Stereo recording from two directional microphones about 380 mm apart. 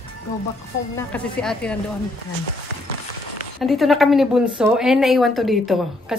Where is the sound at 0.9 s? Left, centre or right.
Centre.